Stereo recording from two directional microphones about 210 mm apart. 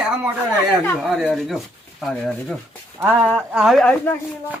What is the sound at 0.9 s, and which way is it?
Speech, centre (ahead or behind).